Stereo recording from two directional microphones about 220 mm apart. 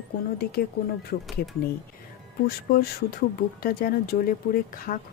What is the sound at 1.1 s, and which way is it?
Speech, 40° left (ahead or behind).